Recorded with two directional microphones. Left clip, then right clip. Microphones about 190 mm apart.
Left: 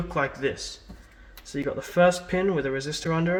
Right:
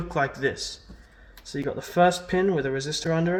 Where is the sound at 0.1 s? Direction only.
35° right (ahead or behind).